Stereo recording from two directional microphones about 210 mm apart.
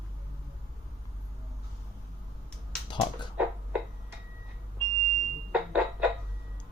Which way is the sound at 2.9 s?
20° left (ahead or behind).